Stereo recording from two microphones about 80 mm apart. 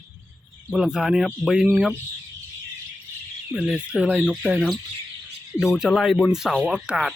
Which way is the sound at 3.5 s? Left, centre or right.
Centre.